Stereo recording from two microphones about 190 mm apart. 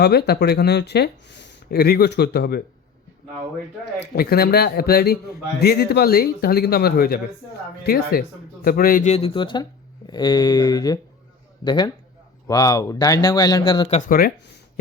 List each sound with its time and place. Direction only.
0.0 s speech: 55° left (ahead or behind)
4.1 s speech: 55° left (ahead or behind); by 14.0 s 30° left (ahead or behind)
14.1 s speech: 50° left (ahead or behind)